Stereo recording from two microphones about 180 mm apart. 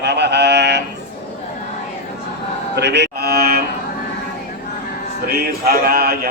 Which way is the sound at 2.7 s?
70° right (ahead or behind).